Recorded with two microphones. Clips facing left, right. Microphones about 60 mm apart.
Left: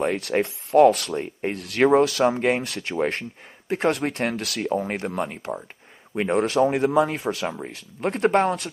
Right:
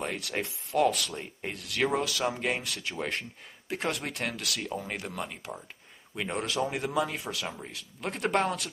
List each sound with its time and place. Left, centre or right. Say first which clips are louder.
0.0 s speech: left 10 dB; left
7.4 s speech: left 9 dB; left